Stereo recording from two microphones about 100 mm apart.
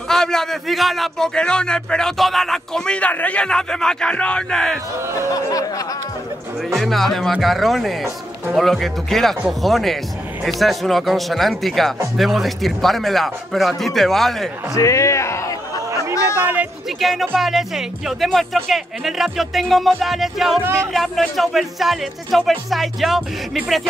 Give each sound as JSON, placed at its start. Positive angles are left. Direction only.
{"t": 0.1, "sound": "a man's voice", "side_deg": 5}
{"t": 5.3, "sound": "speech", "side_deg": 35}
{"t": 6.7, "sound": "speech", "side_deg": 0}
{"t": 14.8, "sound": "speech", "side_deg": 30}
{"t": 17.0, "sound": "speech", "side_deg": 0}